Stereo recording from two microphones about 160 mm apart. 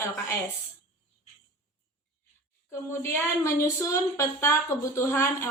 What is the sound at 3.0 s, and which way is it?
A woman's voice, 15° left (ahead or behind).